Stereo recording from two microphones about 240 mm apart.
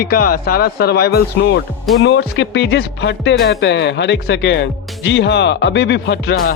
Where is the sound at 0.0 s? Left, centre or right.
Left.